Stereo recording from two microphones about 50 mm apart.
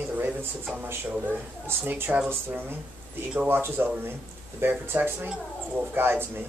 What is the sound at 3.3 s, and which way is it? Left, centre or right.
Speech, right.